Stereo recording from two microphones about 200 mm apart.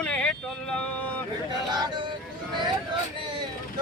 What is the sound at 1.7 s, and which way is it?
Speech, 20° right (ahead or behind).